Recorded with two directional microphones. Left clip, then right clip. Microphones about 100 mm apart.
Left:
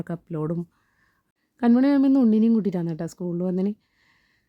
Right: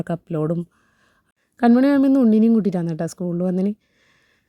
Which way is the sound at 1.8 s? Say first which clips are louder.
Right 3 dB; 35° right (ahead or behind).